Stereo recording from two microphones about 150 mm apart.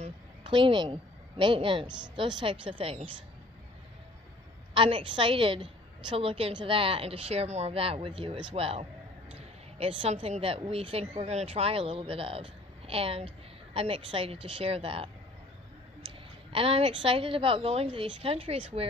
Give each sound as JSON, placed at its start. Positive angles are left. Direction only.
{"t": 0.0, "sound": "speech", "side_deg": -35}
{"t": 4.7, "sound": "a woman's voice", "side_deg": -35}
{"t": 16.5, "sound": "a woman's voice", "side_deg": -40}